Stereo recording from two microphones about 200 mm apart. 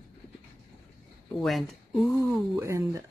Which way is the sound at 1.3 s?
Centre (ahead or behind).